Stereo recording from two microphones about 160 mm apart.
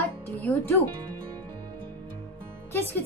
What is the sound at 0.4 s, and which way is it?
Speech, 15° left (ahead or behind).